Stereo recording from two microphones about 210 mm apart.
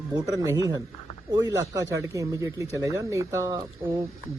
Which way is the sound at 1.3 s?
15° right (ahead or behind).